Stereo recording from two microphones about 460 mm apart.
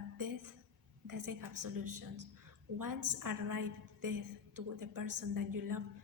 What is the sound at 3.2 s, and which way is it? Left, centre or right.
A woman's voice, right.